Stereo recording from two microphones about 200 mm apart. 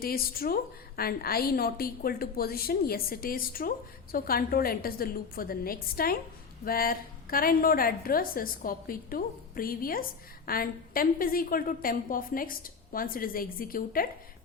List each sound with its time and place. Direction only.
0.0 s a woman's voice: 45° left (ahead or behind)